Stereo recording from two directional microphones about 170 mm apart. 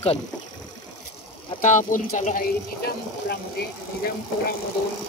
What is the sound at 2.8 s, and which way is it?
Speech, 65° left (ahead or behind).